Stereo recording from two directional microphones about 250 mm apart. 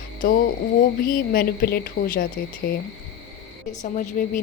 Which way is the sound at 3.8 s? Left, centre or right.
Left.